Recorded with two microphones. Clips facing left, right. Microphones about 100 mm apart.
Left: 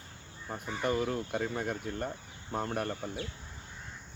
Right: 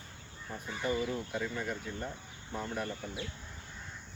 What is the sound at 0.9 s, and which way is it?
Speech, 55° left (ahead or behind).